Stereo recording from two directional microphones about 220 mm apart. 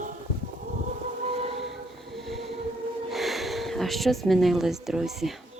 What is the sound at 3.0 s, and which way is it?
Speech, centre (ahead or behind).